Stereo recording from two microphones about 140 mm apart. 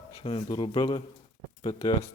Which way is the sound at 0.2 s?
40° left (ahead or behind).